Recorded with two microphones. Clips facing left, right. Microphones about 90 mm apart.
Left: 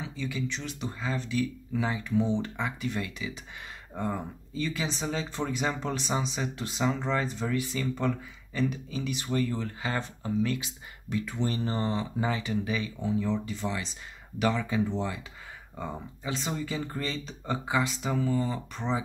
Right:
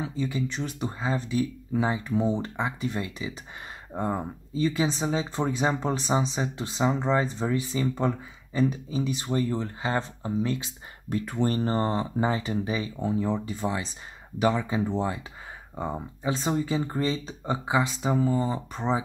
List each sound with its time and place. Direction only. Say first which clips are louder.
0.0 s speech: right 5 dB; 40° right (ahead or behind)
11.1 s speech: right 4 dB; 45° right (ahead or behind)
14.7 s speech: right 2 dB; 40° right (ahead or behind)
15.7 s speech: right 5 dB; 30° right (ahead or behind)
18.0 s speech: right 4 dB; 30° right (ahead or behind)